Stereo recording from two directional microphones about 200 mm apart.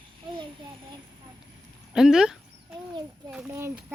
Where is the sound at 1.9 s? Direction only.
5° right (ahead or behind).